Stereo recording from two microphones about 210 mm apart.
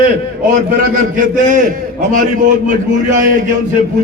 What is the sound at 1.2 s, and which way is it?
A man's voice, 40° right (ahead or behind).